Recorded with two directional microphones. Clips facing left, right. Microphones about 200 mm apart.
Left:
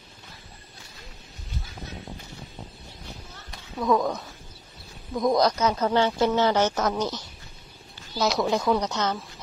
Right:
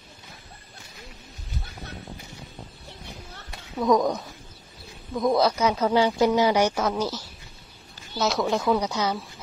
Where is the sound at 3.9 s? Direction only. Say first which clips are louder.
Right 2 dB; 15° right (ahead or behind).